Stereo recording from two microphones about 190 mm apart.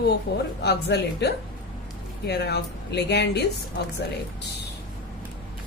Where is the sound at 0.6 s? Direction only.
60° left (ahead or behind).